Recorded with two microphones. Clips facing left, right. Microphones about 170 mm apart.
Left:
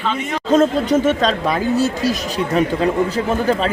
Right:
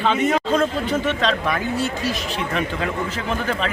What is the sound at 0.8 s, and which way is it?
Speech, 40° left (ahead or behind).